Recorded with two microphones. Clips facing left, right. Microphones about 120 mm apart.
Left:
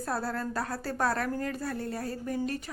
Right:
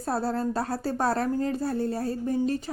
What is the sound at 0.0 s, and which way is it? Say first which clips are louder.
A woman's voice: right 5 dB; 25° right (ahead or behind).